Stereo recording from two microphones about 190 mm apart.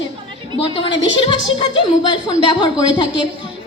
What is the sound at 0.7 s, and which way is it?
A woman's voice, 25° left (ahead or behind).